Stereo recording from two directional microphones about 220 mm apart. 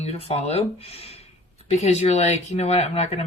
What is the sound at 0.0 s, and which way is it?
Speech, 25° left (ahead or behind).